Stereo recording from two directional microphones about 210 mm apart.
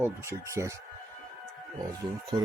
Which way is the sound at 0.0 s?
10° right (ahead or behind).